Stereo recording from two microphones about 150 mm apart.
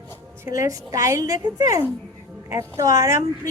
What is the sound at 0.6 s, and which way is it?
A woman's voice, 25° right (ahead or behind).